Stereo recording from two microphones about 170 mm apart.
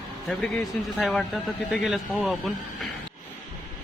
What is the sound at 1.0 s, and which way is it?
Speech, 5° left (ahead or behind).